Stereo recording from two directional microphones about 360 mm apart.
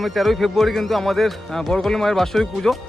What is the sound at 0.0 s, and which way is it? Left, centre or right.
Speech, centre.